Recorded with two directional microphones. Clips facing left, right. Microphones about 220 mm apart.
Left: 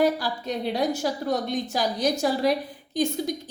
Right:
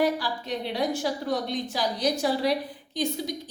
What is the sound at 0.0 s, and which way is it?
A woman's voice, 45° left (ahead or behind).